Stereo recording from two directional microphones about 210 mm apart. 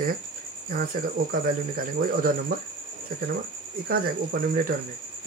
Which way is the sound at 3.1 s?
45° right (ahead or behind).